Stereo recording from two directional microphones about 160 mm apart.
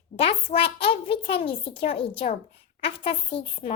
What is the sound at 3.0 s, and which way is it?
Speech, 35° left (ahead or behind).